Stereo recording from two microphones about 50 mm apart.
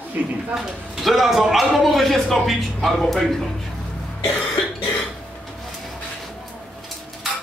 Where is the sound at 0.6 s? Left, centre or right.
Centre.